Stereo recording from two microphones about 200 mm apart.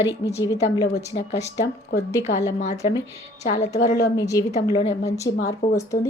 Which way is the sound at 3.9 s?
15° left (ahead or behind).